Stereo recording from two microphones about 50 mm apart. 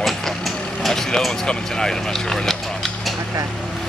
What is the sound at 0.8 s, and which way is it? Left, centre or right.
Speech, centre.